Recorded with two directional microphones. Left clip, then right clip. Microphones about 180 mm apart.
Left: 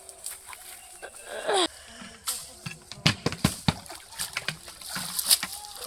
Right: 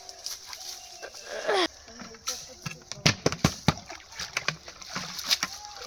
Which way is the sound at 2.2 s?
45° right (ahead or behind).